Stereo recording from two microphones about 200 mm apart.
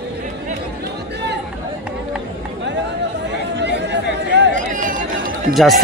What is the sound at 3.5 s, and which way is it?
Chatter, 60° right (ahead or behind).